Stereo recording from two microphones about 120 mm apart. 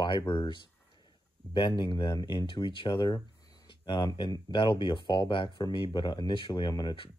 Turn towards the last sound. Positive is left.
turn(degrees=35)  # may be behind; listen again after turning